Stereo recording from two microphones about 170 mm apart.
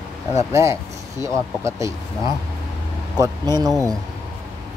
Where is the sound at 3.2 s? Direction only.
20° right (ahead or behind).